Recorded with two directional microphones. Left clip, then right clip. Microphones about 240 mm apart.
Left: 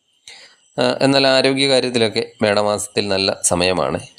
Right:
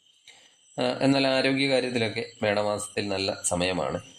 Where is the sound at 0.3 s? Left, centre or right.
Left.